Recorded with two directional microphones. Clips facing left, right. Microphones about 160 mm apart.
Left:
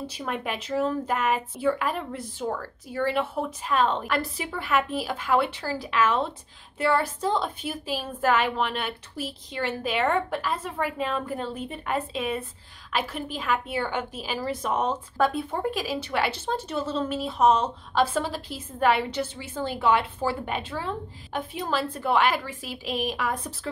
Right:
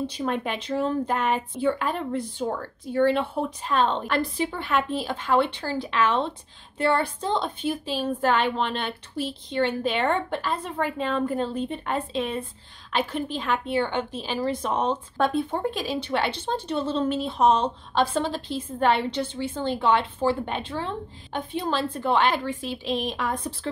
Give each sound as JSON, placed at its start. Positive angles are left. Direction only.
{"t": 0.4, "sound": "a woman's voice", "side_deg": 5}
{"t": 14.6, "sound": "speech", "side_deg": -30}
{"t": 14.9, "sound": "a woman's voice", "side_deg": 5}